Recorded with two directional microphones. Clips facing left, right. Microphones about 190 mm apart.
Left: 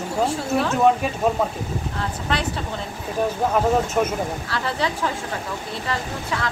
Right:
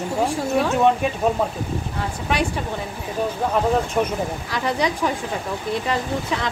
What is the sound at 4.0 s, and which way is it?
Speech, centre (ahead or behind).